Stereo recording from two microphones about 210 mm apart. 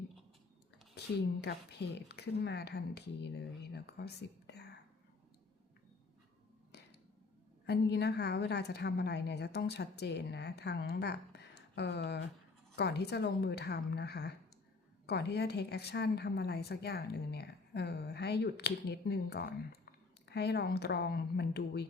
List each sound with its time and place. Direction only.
0.9 s a woman's voice: 55° left (ahead or behind)
7.7 s a woman's voice: 50° left (ahead or behind)